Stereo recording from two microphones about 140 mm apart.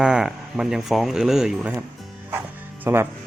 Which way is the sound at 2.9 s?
20° right (ahead or behind).